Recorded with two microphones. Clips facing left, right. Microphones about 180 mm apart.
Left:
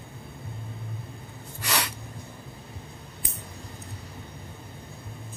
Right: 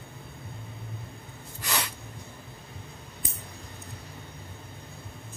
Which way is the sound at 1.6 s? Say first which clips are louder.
Left 2 dB; 75° left (ahead or behind).